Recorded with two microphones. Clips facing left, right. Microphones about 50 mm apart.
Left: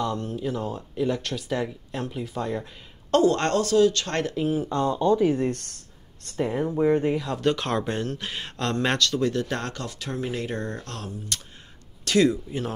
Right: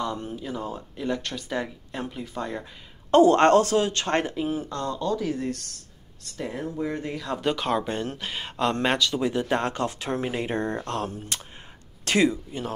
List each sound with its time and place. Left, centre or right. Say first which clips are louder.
0.0 s speech: left 3 dB; centre
3.3 s speech: right 5 dB; right
4.4 s speech: left 3 dB; centre
4.6 s speech: left 6 dB; left
5.4 s speech: left 4 dB; left
6.3 s speech: left 6 dB; left
7.2 s speech: left 1 dB; centre; by 11.5 s right
12.0 s speech: left 1 dB; right
12.4 s speech: left 2 dB; centre